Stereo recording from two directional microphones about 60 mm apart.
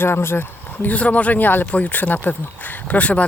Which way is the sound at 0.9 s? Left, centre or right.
Left.